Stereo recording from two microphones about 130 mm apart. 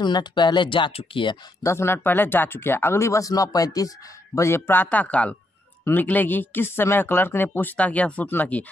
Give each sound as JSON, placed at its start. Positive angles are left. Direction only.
{"t": 0.0, "sound": "speech", "side_deg": 35}
{"t": 1.6, "sound": "speech", "side_deg": 20}